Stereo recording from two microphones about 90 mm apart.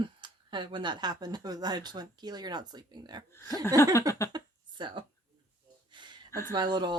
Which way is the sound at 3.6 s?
35° left (ahead or behind).